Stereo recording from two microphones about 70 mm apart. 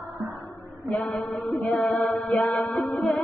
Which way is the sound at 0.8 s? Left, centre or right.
Left.